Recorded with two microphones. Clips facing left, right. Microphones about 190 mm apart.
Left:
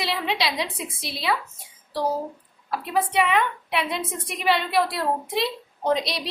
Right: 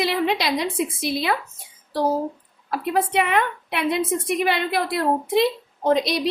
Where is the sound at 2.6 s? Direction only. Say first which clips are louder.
Right 3 dB; 50° right (ahead or behind).